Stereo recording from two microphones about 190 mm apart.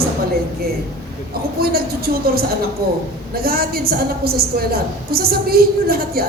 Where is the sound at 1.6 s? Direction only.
55° right (ahead or behind).